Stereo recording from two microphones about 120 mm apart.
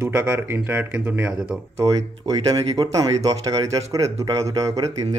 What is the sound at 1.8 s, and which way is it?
Speech, 30° right (ahead or behind).